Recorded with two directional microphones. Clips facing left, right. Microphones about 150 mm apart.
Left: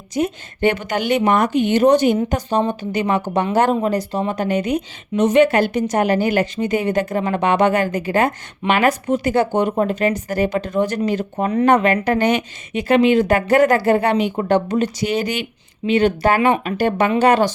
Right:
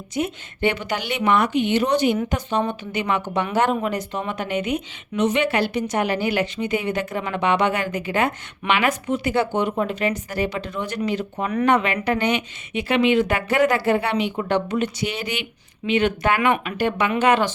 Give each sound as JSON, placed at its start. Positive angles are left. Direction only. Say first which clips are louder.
{"t": 0.1, "sound": "speech", "louder": "left 5 dB", "side_deg": 40}